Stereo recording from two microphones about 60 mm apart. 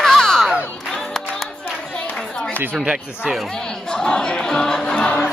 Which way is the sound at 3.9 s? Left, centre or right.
Centre.